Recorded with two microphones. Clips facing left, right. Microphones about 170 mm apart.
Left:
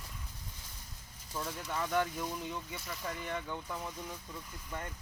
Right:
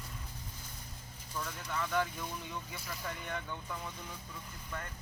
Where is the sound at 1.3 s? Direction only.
20° left (ahead or behind).